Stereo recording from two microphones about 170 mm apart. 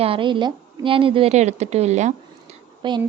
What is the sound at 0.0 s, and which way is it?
A woman's voice, 30° right (ahead or behind).